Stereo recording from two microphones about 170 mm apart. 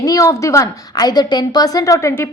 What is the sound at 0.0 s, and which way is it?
A woman's voice, 20° left (ahead or behind).